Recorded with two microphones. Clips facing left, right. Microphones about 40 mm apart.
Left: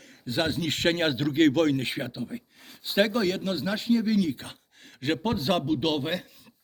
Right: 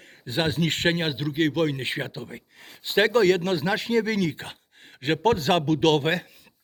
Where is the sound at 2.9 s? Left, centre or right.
Right.